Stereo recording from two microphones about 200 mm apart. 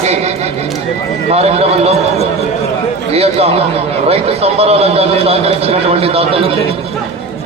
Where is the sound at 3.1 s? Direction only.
30° right (ahead or behind).